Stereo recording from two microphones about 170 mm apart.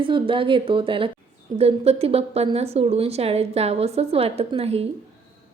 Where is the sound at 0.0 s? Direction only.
30° right (ahead or behind).